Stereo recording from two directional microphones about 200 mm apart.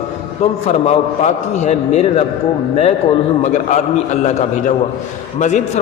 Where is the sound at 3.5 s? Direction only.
35° left (ahead or behind).